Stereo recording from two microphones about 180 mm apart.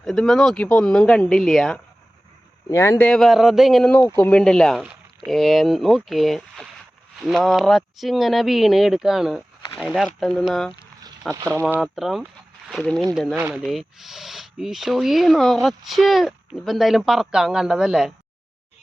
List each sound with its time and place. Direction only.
0.0 s speech: centre (ahead or behind)
2.6 s speech: 15° left (ahead or behind)
11.3 s speech: 15° right (ahead or behind)
11.6 s speech: centre (ahead or behind)
13.1 s speech: 10° right (ahead or behind)